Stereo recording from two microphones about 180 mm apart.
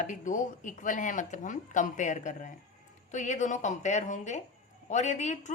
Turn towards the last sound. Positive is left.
turn(degrees=40)  # may be behind; listen again after turning